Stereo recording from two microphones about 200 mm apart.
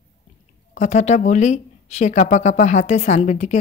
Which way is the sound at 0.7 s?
35° left (ahead or behind).